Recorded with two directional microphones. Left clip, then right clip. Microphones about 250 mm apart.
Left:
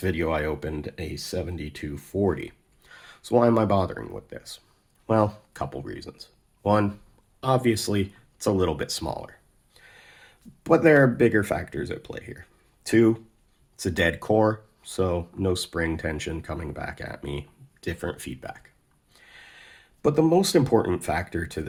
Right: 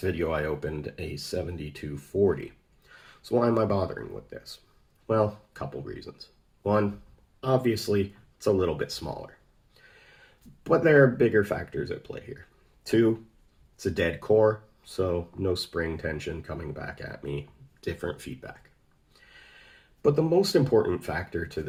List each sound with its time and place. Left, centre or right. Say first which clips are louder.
0.0 s speech: left 2 dB; left